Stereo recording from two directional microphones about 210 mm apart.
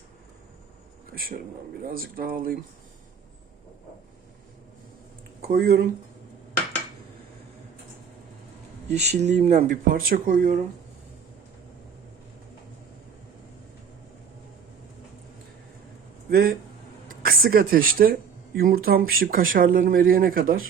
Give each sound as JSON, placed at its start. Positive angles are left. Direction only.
{"t": 1.1, "sound": "a man's voice", "side_deg": -45}
{"t": 5.4, "sound": "speech", "side_deg": -45}
{"t": 8.9, "sound": "speech", "side_deg": -30}
{"t": 16.3, "sound": "a man's voice", "side_deg": -45}